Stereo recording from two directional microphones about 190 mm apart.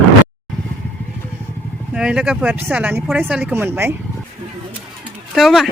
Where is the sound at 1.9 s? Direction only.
5° right (ahead or behind).